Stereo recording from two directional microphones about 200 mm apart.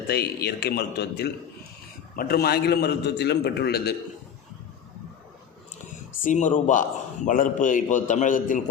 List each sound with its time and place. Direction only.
0.1 s a man's voice: 55° left (ahead or behind)
6.2 s a man's voice: 40° left (ahead or behind)